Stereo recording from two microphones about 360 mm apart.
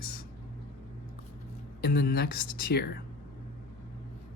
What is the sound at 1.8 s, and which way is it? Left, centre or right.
Speech, left.